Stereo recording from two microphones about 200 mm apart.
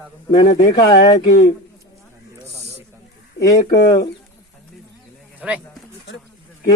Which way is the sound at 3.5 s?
20° left (ahead or behind).